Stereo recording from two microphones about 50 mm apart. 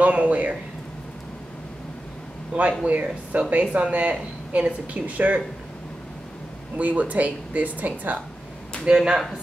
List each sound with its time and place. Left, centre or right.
0.0 s speech: right
2.8 s speech: right
6.8 s speech: right
8.8 s speech: centre